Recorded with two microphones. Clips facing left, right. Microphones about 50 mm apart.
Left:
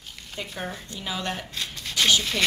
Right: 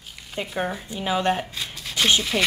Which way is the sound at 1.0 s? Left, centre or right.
Right.